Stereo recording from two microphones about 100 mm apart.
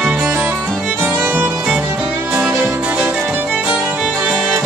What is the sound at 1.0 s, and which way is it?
Music, 15° right (ahead or behind).